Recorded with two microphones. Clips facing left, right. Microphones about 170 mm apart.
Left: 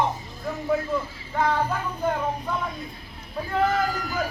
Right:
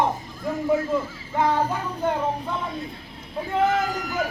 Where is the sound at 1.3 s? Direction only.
20° right (ahead or behind).